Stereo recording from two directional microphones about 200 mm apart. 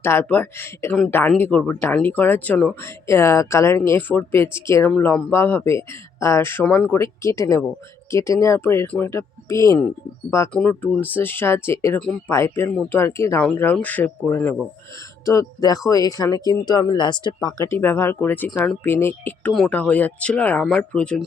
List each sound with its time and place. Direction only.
0.0 s speech: 10° left (ahead or behind)